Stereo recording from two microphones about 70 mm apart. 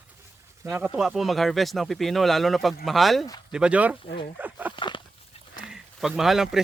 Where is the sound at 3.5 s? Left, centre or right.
Centre.